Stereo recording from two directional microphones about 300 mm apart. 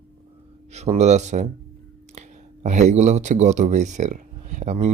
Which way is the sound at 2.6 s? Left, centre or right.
Right.